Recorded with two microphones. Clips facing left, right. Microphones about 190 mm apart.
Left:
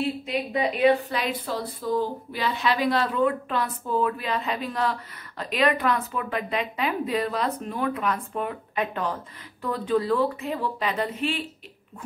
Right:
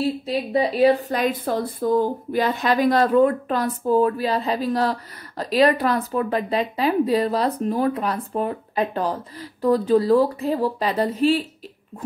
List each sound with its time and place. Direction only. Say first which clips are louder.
0.0 s a woman's voice: right 4 dB; 35° right (ahead or behind)